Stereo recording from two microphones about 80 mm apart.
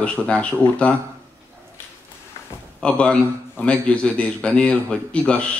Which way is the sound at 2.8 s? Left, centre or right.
Centre.